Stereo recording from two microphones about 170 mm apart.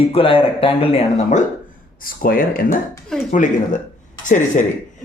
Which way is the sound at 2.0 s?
55° left (ahead or behind).